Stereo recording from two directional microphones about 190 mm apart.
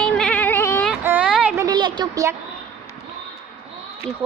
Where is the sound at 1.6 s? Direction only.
25° right (ahead or behind).